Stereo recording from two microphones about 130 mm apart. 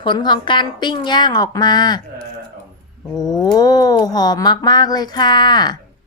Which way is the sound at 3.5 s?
30° left (ahead or behind).